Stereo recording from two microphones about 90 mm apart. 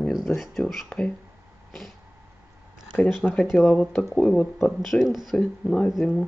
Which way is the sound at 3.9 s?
5° left (ahead or behind).